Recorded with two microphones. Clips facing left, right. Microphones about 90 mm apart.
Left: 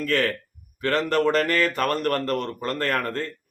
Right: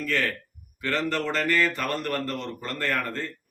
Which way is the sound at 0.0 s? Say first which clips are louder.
Left 4 dB; 50° left (ahead or behind).